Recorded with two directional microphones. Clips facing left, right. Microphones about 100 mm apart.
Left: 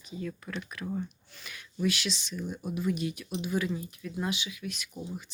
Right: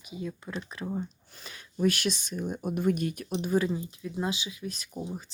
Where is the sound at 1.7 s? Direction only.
45° right (ahead or behind).